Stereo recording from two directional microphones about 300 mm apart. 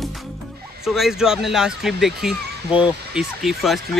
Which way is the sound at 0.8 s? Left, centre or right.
Centre.